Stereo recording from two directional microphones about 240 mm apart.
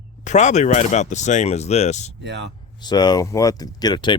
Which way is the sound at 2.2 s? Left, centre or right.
Right.